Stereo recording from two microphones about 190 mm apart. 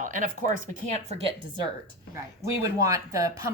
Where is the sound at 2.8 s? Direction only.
15° right (ahead or behind).